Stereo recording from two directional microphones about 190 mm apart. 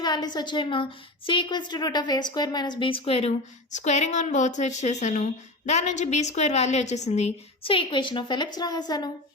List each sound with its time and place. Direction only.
0.0 s a woman's voice: 20° left (ahead or behind)